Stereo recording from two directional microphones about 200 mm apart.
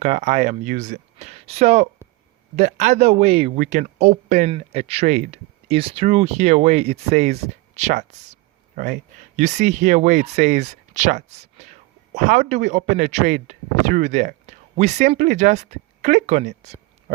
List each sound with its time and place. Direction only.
0.0 s speech: 35° right (ahead or behind)